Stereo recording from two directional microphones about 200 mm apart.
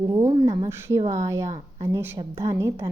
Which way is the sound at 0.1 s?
20° right (ahead or behind).